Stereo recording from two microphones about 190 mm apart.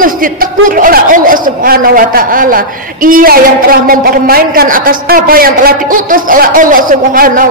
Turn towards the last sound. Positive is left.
turn(degrees=-50)  # may be behind; listen again after turning